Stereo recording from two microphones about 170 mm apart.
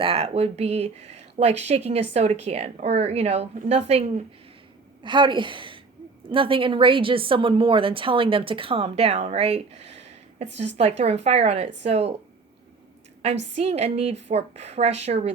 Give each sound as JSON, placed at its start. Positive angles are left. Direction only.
{"t": 0.0, "sound": "a woman's voice", "side_deg": -35}
{"t": 5.0, "sound": "a woman's voice", "side_deg": -30}
{"t": 13.2, "sound": "a woman's voice", "side_deg": -40}